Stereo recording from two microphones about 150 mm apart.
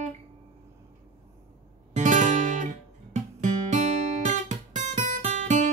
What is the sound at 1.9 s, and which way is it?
Music, 55° right (ahead or behind).